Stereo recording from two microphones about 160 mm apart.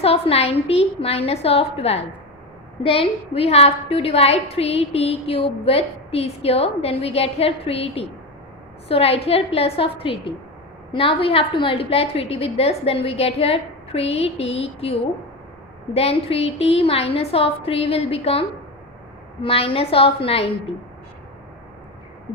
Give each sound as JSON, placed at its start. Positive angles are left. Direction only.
{"t": 0.0, "sound": "a woman's voice", "side_deg": 40}
{"t": 16.0, "sound": "a woman's voice", "side_deg": 40}